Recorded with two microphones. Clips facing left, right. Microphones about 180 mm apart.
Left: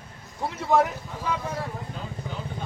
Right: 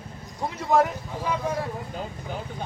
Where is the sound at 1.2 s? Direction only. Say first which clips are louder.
Right 2 dB; 15° right (ahead or behind).